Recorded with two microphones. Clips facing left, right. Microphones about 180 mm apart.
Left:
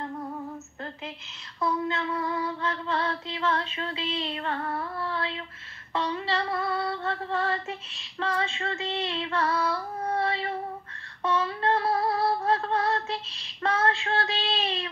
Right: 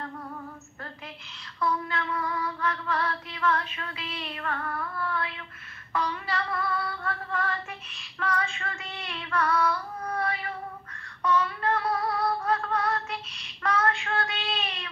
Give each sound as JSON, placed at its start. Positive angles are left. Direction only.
{"t": 1.6, "sound": "female singing", "side_deg": 25}